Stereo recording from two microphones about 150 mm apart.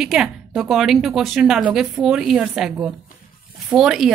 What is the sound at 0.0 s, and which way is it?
A woman's voice, 5° right (ahead or behind).